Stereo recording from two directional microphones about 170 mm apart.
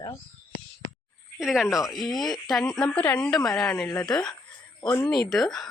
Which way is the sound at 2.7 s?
5° left (ahead or behind).